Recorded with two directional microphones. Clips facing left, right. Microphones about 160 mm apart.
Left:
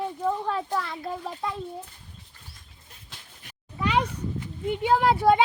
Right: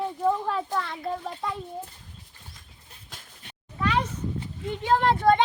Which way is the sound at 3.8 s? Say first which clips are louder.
Left 1 dB; 15° left (ahead or behind).